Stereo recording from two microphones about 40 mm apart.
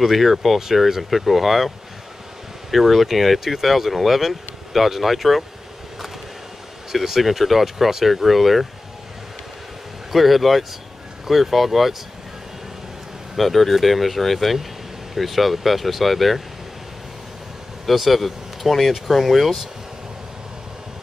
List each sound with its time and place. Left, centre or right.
0.0 s speech: centre
2.7 s speech: centre
6.9 s speech: centre
10.1 s speech: centre
13.4 s speech: centre
17.8 s speech: centre